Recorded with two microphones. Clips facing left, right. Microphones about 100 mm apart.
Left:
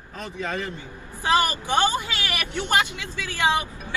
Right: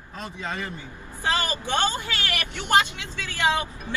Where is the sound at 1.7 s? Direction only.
20° left (ahead or behind).